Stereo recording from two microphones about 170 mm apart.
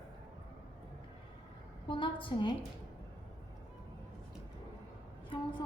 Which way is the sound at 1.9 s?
30° left (ahead or behind).